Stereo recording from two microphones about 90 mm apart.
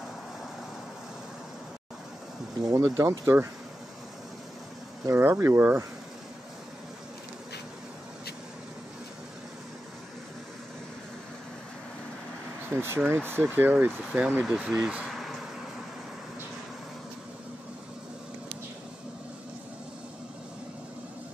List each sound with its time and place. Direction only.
2.6 s speech: 40° right (ahead or behind)
5.0 s speech: 25° right (ahead or behind)
12.7 s speech: 25° right (ahead or behind); by 15.0 s 10° right (ahead or behind)
15.0 s a sound: centre (ahead or behind)